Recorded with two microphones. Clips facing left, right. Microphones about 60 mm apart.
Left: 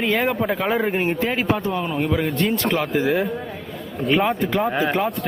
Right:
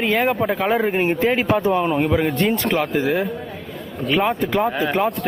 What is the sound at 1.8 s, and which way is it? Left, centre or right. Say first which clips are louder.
Speech: right 4 dB; centre.